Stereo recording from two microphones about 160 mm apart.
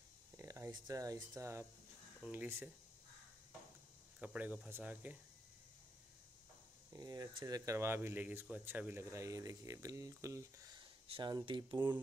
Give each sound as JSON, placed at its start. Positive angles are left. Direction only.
{"t": 0.4, "sound": "speech", "side_deg": -20}
{"t": 4.2, "sound": "speech", "side_deg": -10}
{"t": 6.9, "sound": "speech", "side_deg": -25}
{"t": 11.1, "sound": "speech", "side_deg": -30}